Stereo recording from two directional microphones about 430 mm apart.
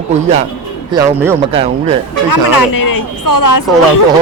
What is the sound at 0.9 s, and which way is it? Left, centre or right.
Speech, centre.